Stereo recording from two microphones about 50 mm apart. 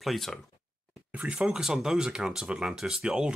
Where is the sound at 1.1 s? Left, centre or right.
Right.